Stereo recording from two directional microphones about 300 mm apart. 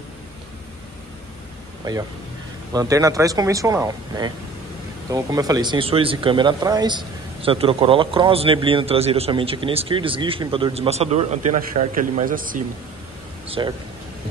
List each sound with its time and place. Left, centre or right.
1.9 s a man's voice: centre
13.5 s speech: centre